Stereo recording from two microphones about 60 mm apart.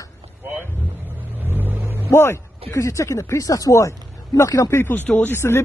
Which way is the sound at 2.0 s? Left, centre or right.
Left.